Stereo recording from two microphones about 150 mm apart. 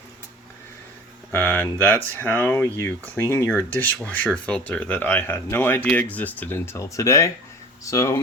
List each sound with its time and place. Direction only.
1.3 s speech: 10° left (ahead or behind)